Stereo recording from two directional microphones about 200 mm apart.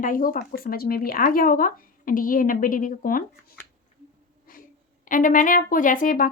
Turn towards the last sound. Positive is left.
turn(degrees=40)  # may be behind; listen again after turning